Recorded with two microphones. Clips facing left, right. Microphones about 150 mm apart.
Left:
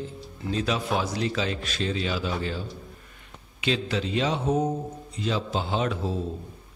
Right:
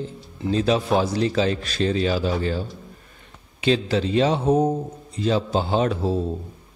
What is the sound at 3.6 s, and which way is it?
A man's voice, 35° right (ahead or behind).